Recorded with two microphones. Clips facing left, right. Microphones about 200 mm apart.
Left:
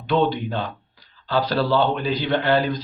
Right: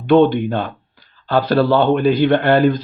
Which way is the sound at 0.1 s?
55° right (ahead or behind).